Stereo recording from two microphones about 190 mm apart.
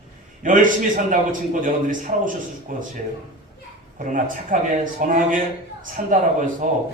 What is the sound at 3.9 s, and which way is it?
A man's voice, 45° right (ahead or behind).